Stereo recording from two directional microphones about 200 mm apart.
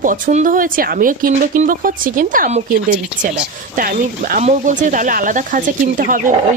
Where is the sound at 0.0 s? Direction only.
40° right (ahead or behind).